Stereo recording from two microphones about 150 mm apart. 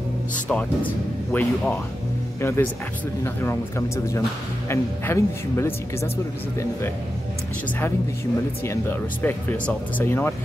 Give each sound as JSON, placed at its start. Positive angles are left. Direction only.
{"t": 0.5, "sound": "speech", "side_deg": 10}
{"t": 8.6, "sound": "speech", "side_deg": 15}